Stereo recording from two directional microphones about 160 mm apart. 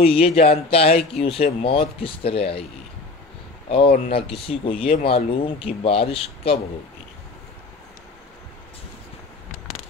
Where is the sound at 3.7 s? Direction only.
35° left (ahead or behind).